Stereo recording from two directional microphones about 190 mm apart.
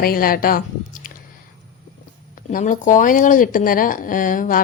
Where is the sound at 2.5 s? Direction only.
45° left (ahead or behind).